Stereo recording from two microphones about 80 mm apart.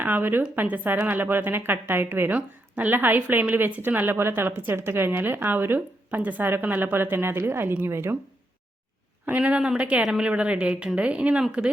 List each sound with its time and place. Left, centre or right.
0.0 s a woman's voice: right
9.2 s a woman's voice: centre